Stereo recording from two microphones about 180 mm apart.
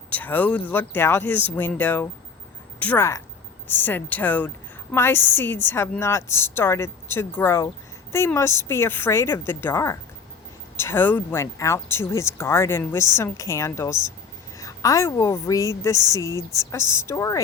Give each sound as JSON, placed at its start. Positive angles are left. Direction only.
{"t": 0.1, "sound": "a woman's voice", "side_deg": 10}